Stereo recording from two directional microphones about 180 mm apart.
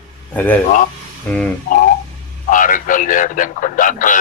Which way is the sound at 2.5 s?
45° left (ahead or behind).